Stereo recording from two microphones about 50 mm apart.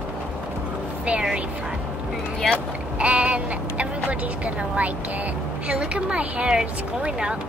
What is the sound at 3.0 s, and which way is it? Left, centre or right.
Speech, right.